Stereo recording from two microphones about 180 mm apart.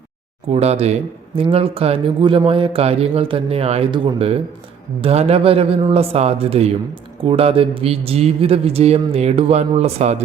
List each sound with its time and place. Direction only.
0.4 s speech: 35° right (ahead or behind)